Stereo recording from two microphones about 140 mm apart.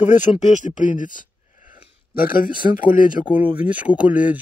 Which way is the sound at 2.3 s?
85° left.